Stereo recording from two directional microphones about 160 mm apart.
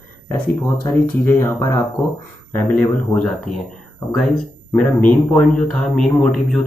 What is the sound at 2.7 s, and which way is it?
Speech, 5° left (ahead or behind).